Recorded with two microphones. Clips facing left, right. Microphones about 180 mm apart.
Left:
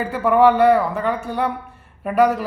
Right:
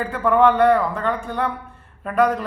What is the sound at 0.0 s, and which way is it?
A man's voice, 5° left (ahead or behind).